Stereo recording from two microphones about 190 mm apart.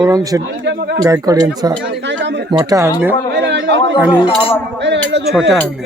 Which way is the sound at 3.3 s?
65° right (ahead or behind).